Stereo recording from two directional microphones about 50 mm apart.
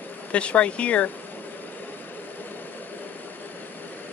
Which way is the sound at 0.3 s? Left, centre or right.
Left.